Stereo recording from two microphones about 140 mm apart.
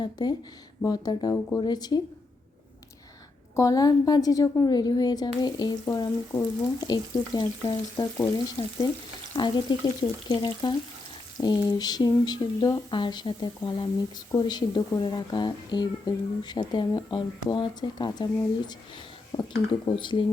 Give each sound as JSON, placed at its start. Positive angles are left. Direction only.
{"t": 0.0, "sound": "speech", "side_deg": 30}
{"t": 3.5, "sound": "speech", "side_deg": 25}
{"t": 8.6, "sound": "speech", "side_deg": 40}
{"t": 19.3, "sound": "speech", "side_deg": 45}